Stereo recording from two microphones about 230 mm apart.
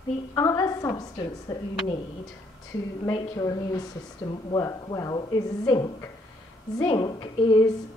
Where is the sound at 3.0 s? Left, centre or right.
Centre.